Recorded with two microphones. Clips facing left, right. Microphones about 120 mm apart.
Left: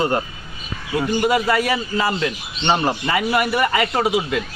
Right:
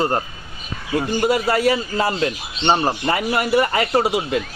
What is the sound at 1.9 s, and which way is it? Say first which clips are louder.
Speech: right 1 dB; 40° right (ahead or behind).